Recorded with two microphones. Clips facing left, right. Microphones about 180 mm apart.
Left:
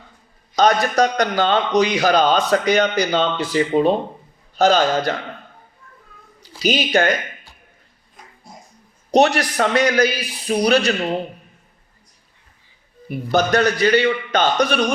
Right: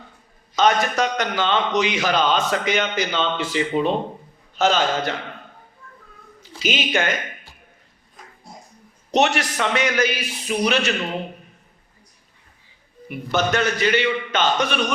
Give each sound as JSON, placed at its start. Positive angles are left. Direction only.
{"t": 0.5, "sound": "a man's voice", "side_deg": 35}
{"t": 6.4, "sound": "speech", "side_deg": 40}
{"t": 9.1, "sound": "a man's voice", "side_deg": 35}
{"t": 13.3, "sound": "a man's voice", "side_deg": 35}